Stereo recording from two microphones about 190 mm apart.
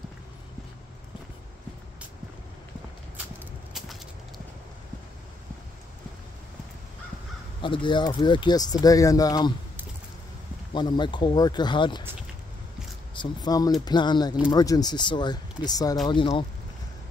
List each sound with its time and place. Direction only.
7.6 s speech: 25° left (ahead or behind)
10.7 s speech: 25° left (ahead or behind)
13.1 s speech: 20° left (ahead or behind)